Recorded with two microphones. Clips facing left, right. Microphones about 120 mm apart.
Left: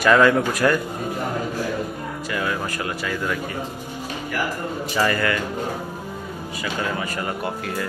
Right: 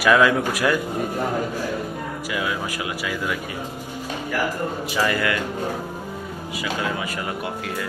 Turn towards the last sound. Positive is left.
turn(degrees=0)  # may be behind; listen again after turning